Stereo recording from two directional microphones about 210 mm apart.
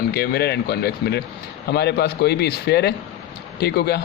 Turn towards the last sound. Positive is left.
turn(degrees=50)  # may be behind; listen again after turning